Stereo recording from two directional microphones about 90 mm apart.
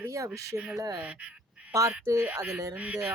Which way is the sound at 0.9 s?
15° right (ahead or behind).